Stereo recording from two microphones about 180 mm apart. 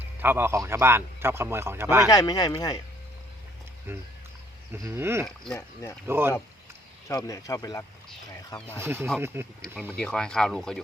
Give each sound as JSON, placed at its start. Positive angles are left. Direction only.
{"t": 0.2, "sound": "a man's voice", "side_deg": -10}
{"t": 2.0, "sound": "speech", "side_deg": 20}
{"t": 3.9, "sound": "a man's voice", "side_deg": -15}
{"t": 5.5, "sound": "speech", "side_deg": 15}
{"t": 6.1, "sound": "a man's voice", "side_deg": -15}
{"t": 7.1, "sound": "speech", "side_deg": 20}
{"t": 8.5, "sound": "speech", "side_deg": 10}
{"t": 8.8, "sound": "a man's voice", "side_deg": -10}
{"t": 9.9, "sound": "speech", "side_deg": 5}